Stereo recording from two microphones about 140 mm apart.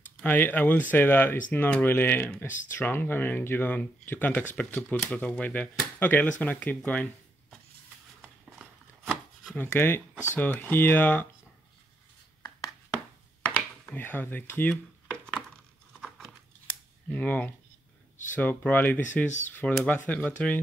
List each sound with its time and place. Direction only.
0.2 s speech: 15° left (ahead or behind)
2.4 s speech: 65° left (ahead or behind)
2.7 s speech: 15° left (ahead or behind)
8.2 s chopping: 5° right (ahead or behind)
9.6 s speech: 15° left (ahead or behind)
13.8 s speech: 15° left (ahead or behind)
16.6 s a sound: 10° left (ahead or behind)
18.3 s speech: 10° left (ahead or behind)
19.2 s speech: 60° left (ahead or behind)
19.9 s speech: 10° left (ahead or behind)